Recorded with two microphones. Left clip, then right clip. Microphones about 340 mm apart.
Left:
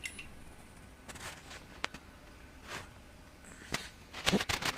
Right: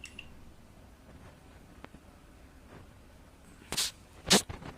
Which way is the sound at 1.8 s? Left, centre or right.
Left.